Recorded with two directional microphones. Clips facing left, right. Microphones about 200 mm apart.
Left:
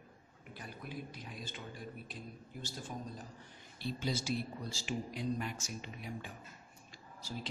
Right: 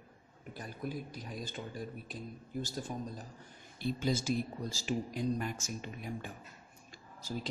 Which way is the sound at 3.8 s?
50° right (ahead or behind).